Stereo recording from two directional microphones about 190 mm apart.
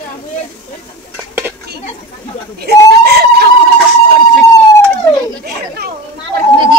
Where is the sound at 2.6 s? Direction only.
55° right (ahead or behind).